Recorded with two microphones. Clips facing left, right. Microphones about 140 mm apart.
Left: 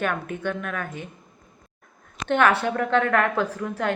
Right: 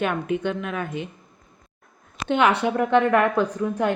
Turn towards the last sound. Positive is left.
turn(degrees=-15)  # may be behind; listen again after turning